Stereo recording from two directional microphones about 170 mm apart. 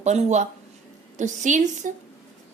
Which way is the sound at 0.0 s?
40° right (ahead or behind).